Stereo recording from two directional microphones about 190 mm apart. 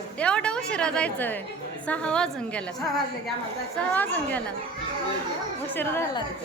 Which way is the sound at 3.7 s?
10° left (ahead or behind).